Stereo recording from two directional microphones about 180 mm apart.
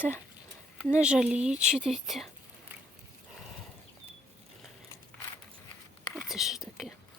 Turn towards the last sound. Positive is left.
turn(degrees=0)  # may be behind; listen again after turning